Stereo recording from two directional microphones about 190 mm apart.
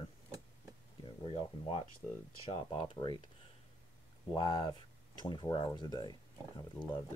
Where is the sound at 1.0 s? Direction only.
30° left (ahead or behind).